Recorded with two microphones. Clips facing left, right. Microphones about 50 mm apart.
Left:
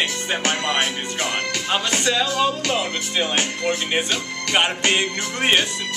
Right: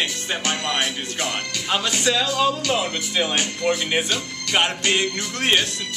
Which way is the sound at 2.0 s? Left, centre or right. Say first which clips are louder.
Right 1 dB; centre.